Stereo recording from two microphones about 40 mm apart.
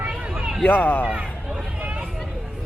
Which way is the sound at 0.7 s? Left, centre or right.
Left.